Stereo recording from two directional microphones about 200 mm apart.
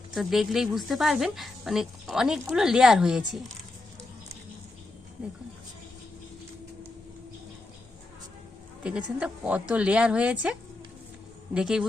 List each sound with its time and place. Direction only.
0.1 s a woman's voice: centre (ahead or behind)
8.8 s a woman's voice: 5° right (ahead or behind)